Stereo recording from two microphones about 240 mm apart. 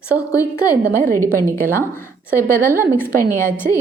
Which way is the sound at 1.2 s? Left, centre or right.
Centre.